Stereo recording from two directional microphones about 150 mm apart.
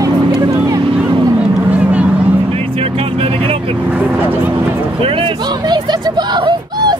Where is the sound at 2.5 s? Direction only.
40° right (ahead or behind).